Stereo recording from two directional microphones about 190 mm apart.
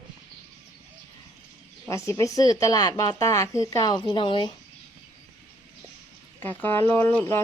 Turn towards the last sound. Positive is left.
turn(degrees=10)  # may be behind; listen again after turning